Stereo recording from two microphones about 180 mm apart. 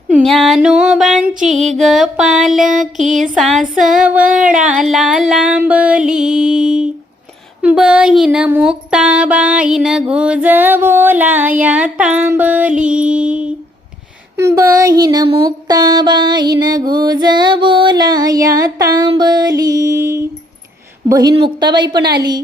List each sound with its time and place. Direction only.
0.2 s music: centre (ahead or behind)
3.0 s music: 45° right (ahead or behind)
3.3 s music: centre (ahead or behind)
7.6 s a sound: 5° right (ahead or behind)
14.3 s mantra: 15° right (ahead or behind)